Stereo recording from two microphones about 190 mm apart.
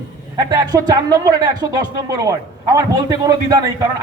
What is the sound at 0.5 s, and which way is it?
A man's voice, 20° right (ahead or behind).